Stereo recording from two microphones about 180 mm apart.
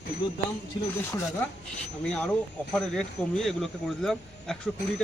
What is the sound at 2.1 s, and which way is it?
A man's voice, 5° left (ahead or behind).